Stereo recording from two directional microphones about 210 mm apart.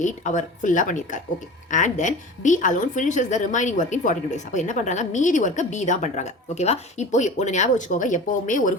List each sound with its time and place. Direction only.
0.0 s a woman's voice: 35° left (ahead or behind)